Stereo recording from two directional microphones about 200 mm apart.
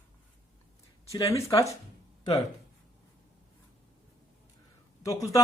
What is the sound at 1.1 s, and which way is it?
Speech, 15° left (ahead or behind).